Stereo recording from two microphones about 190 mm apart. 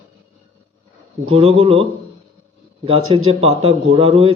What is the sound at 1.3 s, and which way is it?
Speech, 30° right (ahead or behind).